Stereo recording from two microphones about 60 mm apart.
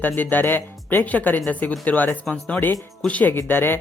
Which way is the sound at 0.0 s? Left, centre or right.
Left.